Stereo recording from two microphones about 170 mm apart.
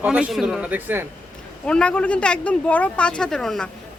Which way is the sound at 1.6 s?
5° left (ahead or behind).